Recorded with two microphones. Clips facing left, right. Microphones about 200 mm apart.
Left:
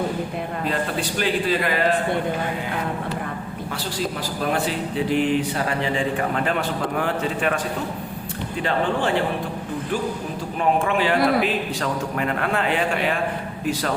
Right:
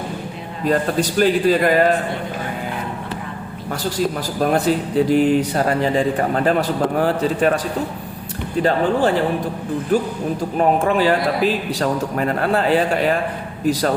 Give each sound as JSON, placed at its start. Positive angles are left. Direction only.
{"t": 0.6, "sound": "a man's voice", "side_deg": -45}
{"t": 4.4, "sound": "speech", "side_deg": -45}
{"t": 8.6, "sound": "speech", "side_deg": -40}